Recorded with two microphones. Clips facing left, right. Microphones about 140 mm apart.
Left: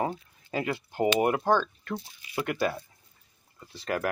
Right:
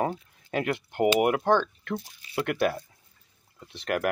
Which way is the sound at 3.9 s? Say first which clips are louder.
Right 2 dB; 5° right (ahead or behind).